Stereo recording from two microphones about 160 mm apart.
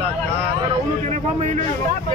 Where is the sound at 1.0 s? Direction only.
50° right (ahead or behind).